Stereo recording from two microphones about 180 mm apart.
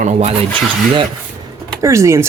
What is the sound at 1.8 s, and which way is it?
Speech, 15° right (ahead or behind).